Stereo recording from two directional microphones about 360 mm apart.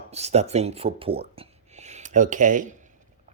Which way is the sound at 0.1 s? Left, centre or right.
Centre.